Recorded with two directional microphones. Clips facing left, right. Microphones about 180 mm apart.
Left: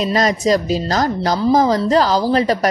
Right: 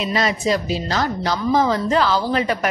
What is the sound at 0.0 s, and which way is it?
A woman's voice, 40° left (ahead or behind).